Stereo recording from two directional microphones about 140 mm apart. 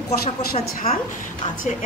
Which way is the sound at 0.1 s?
90° left.